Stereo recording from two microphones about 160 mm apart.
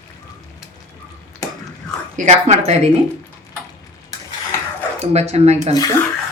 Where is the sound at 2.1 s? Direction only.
50° right (ahead or behind).